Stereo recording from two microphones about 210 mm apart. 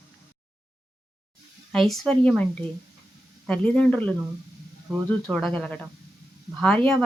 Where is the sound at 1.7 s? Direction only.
Centre (ahead or behind).